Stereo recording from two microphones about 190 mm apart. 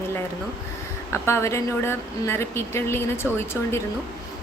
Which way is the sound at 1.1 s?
15° left (ahead or behind).